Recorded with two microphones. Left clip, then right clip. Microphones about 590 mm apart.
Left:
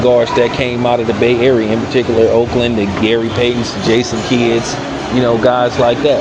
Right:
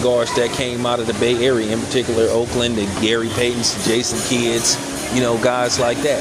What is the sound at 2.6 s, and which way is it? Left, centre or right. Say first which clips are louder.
Speech: left 5 dB; right.